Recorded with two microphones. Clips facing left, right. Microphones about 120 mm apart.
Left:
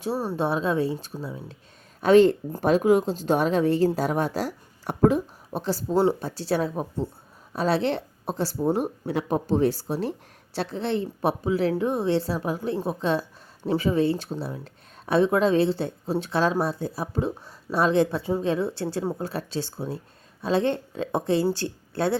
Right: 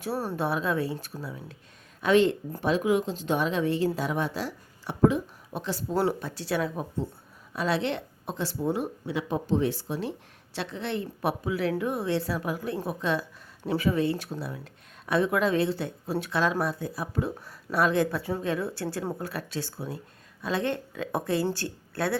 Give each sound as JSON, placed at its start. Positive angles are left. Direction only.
{"t": 0.0, "sound": "speech", "side_deg": 20}
{"t": 2.0, "sound": "a woman's voice", "side_deg": 40}
{"t": 5.9, "sound": "a woman's voice", "side_deg": 25}